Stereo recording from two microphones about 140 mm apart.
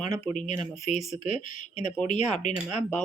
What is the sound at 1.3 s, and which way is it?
Speech, 60° left (ahead or behind).